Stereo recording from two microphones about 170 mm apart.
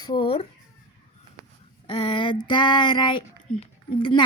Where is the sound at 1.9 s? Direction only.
30° left (ahead or behind).